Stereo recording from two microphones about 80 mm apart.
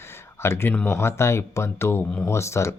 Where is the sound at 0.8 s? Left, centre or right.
Left.